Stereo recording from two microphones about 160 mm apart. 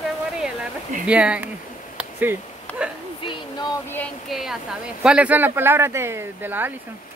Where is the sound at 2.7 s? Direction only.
10° left (ahead or behind).